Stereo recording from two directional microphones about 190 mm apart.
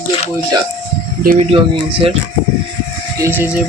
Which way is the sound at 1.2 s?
45° right (ahead or behind).